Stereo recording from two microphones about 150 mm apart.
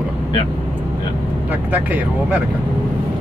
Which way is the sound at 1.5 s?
10° right (ahead or behind).